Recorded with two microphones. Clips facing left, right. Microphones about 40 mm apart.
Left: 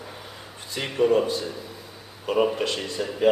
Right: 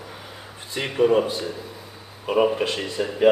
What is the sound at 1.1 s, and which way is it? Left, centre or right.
A man's voice, right.